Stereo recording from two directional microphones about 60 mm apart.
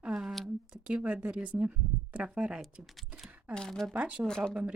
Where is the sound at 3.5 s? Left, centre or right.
Centre.